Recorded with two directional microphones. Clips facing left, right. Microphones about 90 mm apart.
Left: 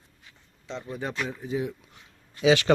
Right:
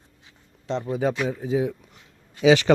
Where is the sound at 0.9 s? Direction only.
90° right.